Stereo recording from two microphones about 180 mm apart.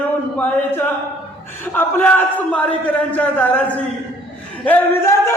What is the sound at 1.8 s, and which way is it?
A man's voice, 10° left (ahead or behind).